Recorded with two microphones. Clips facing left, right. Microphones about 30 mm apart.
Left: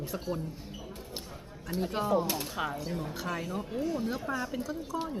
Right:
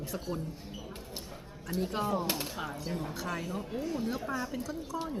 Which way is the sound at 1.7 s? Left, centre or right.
Centre.